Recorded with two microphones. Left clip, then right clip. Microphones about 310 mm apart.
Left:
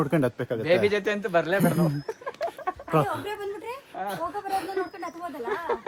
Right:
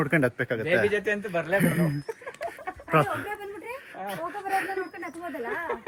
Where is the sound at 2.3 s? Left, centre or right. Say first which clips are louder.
Left 7 dB; centre.